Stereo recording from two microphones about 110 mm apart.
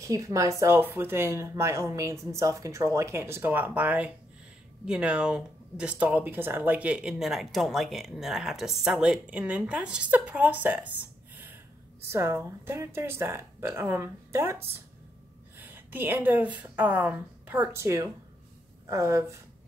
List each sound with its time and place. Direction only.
0.0 s a woman's voice: 30° right (ahead or behind)